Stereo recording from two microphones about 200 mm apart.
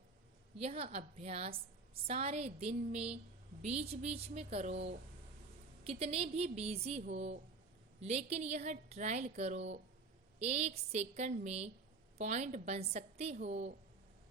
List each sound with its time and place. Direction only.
0.6 s a woman's voice: 30° right (ahead or behind)